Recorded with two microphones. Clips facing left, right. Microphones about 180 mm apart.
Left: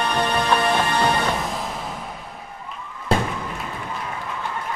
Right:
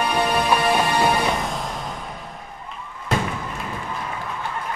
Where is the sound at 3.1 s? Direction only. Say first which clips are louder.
Left 2 dB; 30° left (ahead or behind).